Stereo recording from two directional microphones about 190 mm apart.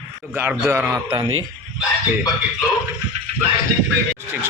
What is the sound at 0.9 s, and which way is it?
Speech, 20° right (ahead or behind).